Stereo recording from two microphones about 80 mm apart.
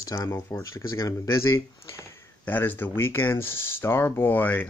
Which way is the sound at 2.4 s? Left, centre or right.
Left.